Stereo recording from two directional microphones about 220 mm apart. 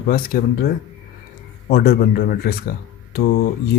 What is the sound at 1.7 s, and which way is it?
Speech, 45° left (ahead or behind).